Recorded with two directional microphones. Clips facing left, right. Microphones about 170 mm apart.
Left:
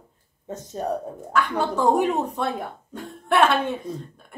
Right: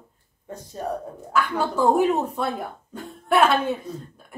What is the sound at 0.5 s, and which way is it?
Speech, 20° left (ahead or behind).